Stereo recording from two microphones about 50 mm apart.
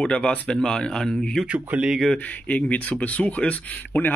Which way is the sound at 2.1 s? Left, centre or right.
Left.